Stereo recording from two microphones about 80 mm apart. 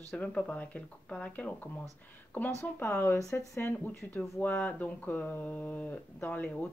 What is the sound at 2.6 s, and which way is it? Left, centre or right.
Speech, left.